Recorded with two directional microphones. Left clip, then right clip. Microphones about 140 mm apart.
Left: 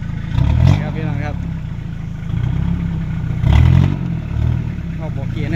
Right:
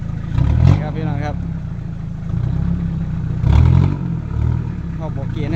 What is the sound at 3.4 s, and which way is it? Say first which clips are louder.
Vehicle: left 1 dB; 45° left (ahead or behind).